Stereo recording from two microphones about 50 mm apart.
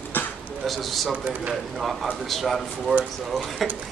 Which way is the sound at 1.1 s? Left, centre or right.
Right.